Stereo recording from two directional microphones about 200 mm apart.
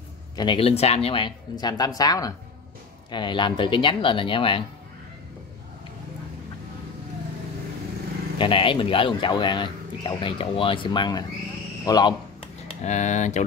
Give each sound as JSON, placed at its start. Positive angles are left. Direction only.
{"t": 0.4, "sound": "speech", "side_deg": 25}
{"t": 8.4, "sound": "speech", "side_deg": 25}
{"t": 12.8, "sound": "speech", "side_deg": 35}